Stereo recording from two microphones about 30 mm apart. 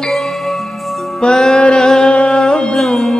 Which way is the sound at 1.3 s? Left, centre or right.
Centre.